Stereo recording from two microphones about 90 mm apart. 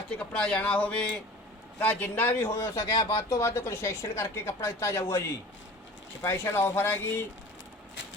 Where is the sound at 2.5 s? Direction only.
35° left (ahead or behind).